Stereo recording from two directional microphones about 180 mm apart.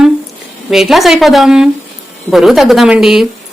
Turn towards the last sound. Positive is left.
turn(degrees=0)  # may be behind; listen again after turning